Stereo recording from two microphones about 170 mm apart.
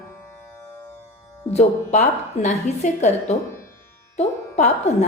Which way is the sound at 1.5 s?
40° left (ahead or behind).